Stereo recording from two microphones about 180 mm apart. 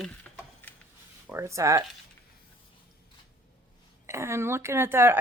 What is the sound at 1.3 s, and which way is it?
Speech, 15° right (ahead or behind).